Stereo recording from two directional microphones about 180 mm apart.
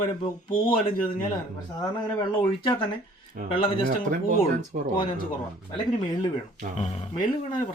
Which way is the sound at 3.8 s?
50° right (ahead or behind).